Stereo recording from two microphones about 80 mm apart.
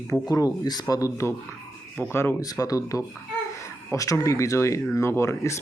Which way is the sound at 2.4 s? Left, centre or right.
Left.